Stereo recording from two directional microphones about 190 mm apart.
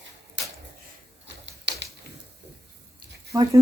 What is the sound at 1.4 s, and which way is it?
Typewriter, 65° right (ahead or behind).